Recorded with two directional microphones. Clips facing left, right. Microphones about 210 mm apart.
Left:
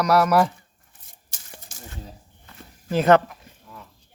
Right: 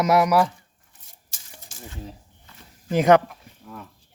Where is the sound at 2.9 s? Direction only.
15° right (ahead or behind).